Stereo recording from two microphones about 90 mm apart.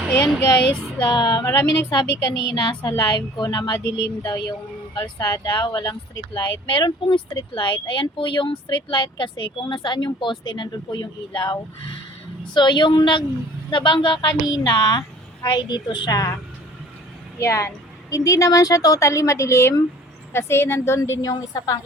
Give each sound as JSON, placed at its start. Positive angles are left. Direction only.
{"t": 1.0, "sound": "speech", "side_deg": 45}
{"t": 1.5, "sound": "a woman's voice", "side_deg": 35}
{"t": 6.3, "sound": "speech", "side_deg": 60}
{"t": 12.5, "sound": "speech", "side_deg": 60}
{"t": 16.0, "sound": "speech", "side_deg": 45}
{"t": 17.4, "sound": "a woman's voice", "side_deg": 30}